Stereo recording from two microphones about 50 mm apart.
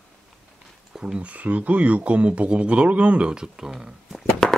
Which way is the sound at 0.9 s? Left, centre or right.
Centre.